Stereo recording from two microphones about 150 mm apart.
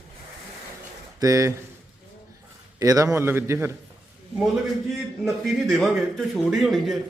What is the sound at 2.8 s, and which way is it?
Speech, 20° right (ahead or behind).